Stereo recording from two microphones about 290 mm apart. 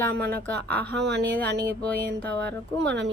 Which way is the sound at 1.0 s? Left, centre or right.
Right.